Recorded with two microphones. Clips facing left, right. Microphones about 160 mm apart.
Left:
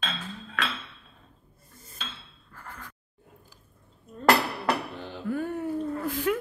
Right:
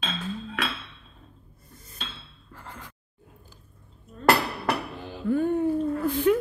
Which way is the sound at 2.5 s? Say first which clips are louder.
Right 1 dB; 20° right (ahead or behind).